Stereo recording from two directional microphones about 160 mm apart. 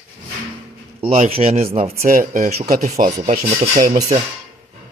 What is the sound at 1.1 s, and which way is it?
Speech, 40° right (ahead or behind).